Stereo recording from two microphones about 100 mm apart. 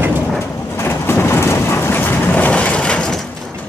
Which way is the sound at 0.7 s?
25° left (ahead or behind).